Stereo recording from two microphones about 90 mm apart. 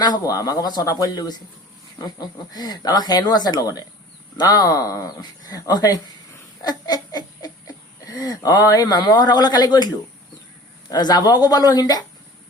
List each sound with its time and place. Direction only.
0.0 s speech: 45° left (ahead or behind)
6.6 s a sound: 45° left (ahead or behind)
8.0 s speech: 45° left (ahead or behind)